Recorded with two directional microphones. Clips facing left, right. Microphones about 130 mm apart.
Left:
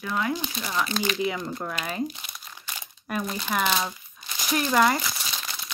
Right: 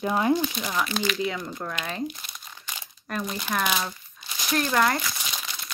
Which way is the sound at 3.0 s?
10° left (ahead or behind).